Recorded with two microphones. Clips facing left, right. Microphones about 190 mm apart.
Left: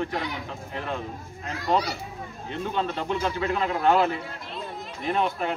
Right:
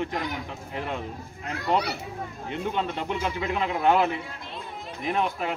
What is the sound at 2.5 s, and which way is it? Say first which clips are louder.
Speech: left 1 dB; 15° right (ahead or behind).